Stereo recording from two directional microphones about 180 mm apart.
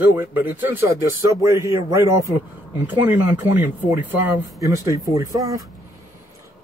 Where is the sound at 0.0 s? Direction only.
10° right (ahead or behind).